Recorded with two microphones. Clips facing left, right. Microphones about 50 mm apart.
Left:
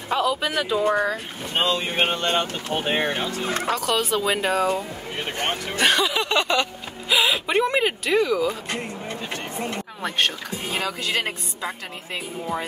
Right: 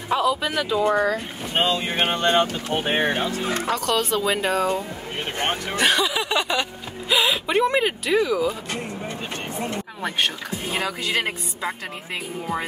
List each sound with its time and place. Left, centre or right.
0.1 s music: centre
0.6 s speech: centre
2.0 s speech: right
3.5 s speech: centre
5.4 s speech: right
5.8 s speech: centre
7.1 s speech: centre
10.0 s speech: centre